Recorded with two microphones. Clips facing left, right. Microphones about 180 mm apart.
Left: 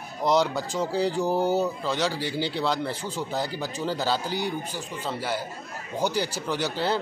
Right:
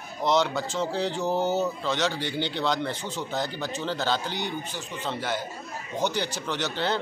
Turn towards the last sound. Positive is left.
turn(degrees=5)  # may be behind; listen again after turning